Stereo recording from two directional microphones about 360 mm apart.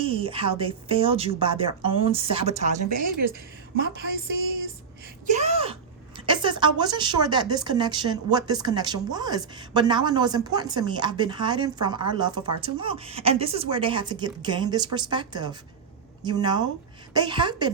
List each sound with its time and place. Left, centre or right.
0.0 s speech: centre
5.3 s a sound: centre
6.1 s speech: centre